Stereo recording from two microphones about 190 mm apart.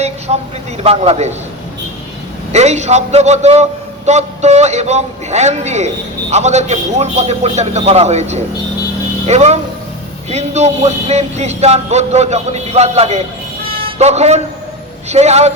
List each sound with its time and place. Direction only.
0.3 s a man's voice: 35° right (ahead or behind)
2.5 s a man's voice: 35° right (ahead or behind)